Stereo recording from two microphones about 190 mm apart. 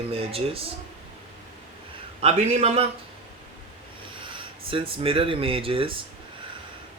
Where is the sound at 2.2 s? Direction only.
35° right (ahead or behind).